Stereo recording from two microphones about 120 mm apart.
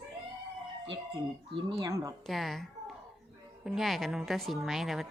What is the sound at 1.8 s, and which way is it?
Speech, 25° right (ahead or behind).